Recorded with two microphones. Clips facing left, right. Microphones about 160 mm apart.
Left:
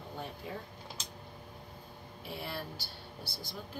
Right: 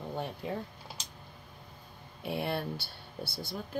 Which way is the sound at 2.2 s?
65° right (ahead or behind).